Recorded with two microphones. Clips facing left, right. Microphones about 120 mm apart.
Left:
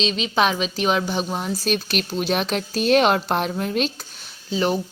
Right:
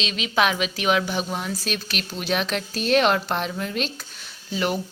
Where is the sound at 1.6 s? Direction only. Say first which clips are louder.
Left 6 dB; 45° left (ahead or behind).